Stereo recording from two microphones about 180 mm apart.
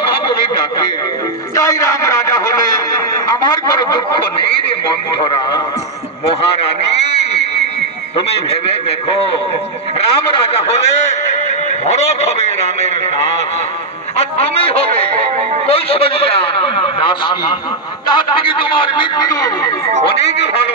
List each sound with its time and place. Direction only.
1.5 s speech: 20° left (ahead or behind)
10.1 s a man's voice: 30° left (ahead or behind)
14.1 s a man's voice: 35° left (ahead or behind)
20.2 s speech: 70° left (ahead or behind)